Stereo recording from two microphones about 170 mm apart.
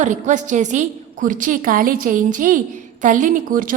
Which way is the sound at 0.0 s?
45° right (ahead or behind).